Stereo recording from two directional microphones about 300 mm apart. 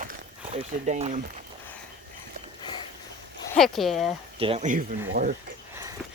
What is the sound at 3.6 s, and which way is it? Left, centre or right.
Speech, centre.